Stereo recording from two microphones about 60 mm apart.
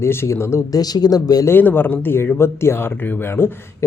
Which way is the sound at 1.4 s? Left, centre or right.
Left.